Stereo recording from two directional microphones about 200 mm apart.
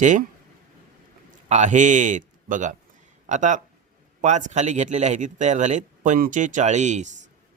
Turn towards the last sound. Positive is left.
turn(degrees=-35)  # may be behind; listen again after turning